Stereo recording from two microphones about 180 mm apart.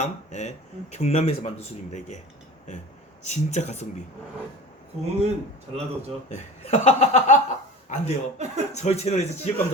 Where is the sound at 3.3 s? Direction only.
40° left (ahead or behind).